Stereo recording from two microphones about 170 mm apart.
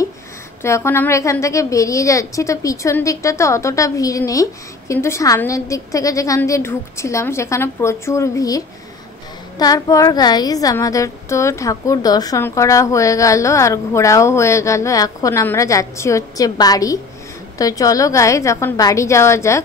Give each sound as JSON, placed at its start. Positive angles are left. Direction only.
{"t": 0.6, "sound": "a woman's voice", "side_deg": 15}